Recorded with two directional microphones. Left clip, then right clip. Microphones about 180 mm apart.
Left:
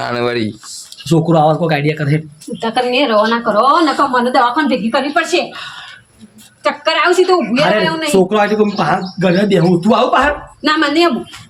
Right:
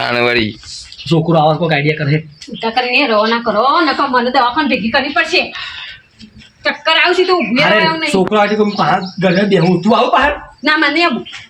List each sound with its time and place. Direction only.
0.0 s a man's voice: 5° left (ahead or behind)
2.6 s a woman's voice: 15° left (ahead or behind)
6.6 s a woman's voice: 15° left (ahead or behind)
7.3 s a man's voice: 5° left (ahead or behind)
7.6 s a woman's voice: 15° left (ahead or behind)
8.3 s a man's voice: 5° left (ahead or behind)
10.6 s a woman's voice: 15° left (ahead or behind)